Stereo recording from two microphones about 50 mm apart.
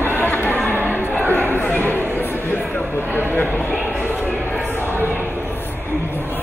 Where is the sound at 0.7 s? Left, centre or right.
Left.